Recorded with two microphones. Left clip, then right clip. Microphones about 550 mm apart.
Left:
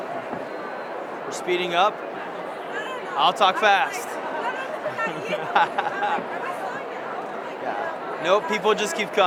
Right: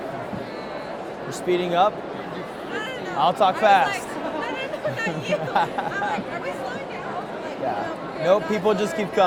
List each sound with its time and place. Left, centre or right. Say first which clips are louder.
1.5 s speech: right 1 dB; right
3.2 s speech: even; right
8.2 s speech: right 1 dB; right